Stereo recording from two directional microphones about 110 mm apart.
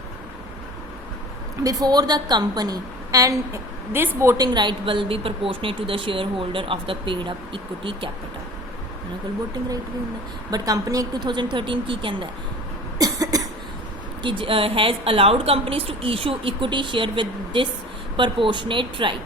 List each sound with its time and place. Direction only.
1.6 s a woman's voice: 35° right (ahead or behind)
4.4 s speech: 40° right (ahead or behind)
10.5 s a woman's voice: 35° right (ahead or behind)
11.5 s speech: 50° right (ahead or behind)
13.0 s cough: 35° right (ahead or behind)
14.2 s a woman's voice: 50° right (ahead or behind)